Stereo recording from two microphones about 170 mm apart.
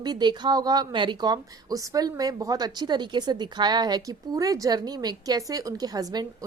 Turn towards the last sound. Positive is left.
turn(degrees=-20)  # may be behind; listen again after turning